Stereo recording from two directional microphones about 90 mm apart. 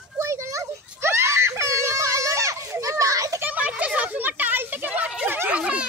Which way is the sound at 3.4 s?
15° right (ahead or behind).